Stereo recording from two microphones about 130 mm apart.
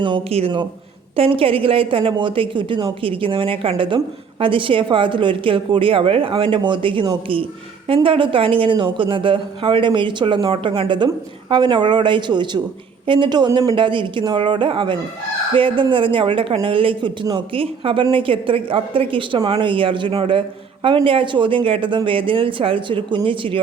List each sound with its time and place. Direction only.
0.0 s a woman's voice: 45° right (ahead or behind)